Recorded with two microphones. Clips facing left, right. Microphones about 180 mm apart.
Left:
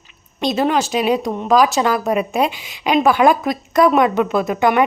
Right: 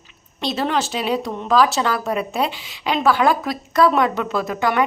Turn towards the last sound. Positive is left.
turn(degrees=20)  # may be behind; listen again after turning